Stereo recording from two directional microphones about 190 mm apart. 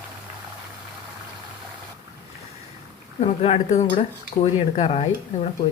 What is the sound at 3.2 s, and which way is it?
Cutlery, 35° left (ahead or behind).